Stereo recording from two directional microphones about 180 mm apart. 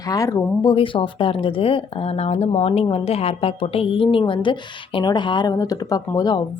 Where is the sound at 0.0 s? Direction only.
20° left (ahead or behind).